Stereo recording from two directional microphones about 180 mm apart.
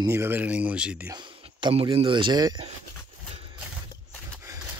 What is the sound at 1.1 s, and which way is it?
Speech, 25° right (ahead or behind).